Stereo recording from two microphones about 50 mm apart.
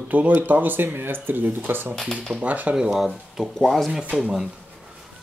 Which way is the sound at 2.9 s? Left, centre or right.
Centre.